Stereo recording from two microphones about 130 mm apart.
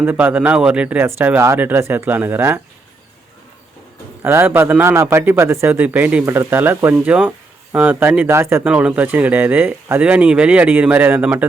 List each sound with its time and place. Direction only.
0.0 s speech: 15° right (ahead or behind)
4.2 s a man's voice: 20° right (ahead or behind)